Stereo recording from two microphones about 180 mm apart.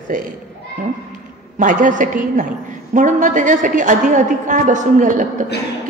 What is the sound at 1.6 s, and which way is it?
A woman's voice, 45° right (ahead or behind).